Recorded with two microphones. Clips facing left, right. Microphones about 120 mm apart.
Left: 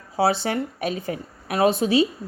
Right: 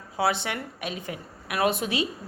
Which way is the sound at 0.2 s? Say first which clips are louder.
Left 5 dB; 35° left (ahead or behind).